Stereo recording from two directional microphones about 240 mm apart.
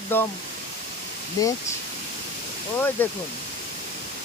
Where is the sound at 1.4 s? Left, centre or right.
Centre.